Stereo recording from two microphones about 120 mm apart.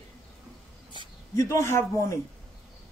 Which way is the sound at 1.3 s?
25° left (ahead or behind).